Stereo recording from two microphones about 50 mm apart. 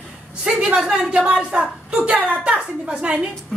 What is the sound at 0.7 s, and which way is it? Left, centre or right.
A woman's voice, centre.